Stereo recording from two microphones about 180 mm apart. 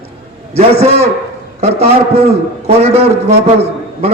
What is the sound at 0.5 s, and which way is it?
Speech, 35° right (ahead or behind).